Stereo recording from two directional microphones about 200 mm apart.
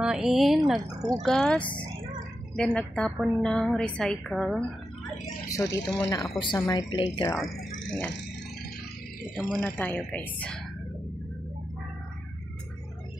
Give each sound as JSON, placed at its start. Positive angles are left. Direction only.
{"t": 0.0, "sound": "a woman's voice", "side_deg": -5}
{"t": 0.7, "sound": "speech", "side_deg": -20}
{"t": 1.2, "sound": "a woman's voice", "side_deg": 0}
{"t": 5.5, "sound": "a woman's voice", "side_deg": 15}
{"t": 9.3, "sound": "a woman's voice", "side_deg": 0}